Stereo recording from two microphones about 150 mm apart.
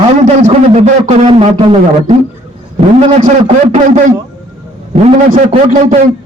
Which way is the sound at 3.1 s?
55° right (ahead or behind).